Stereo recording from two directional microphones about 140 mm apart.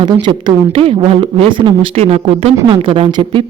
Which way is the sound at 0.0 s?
35° right (ahead or behind).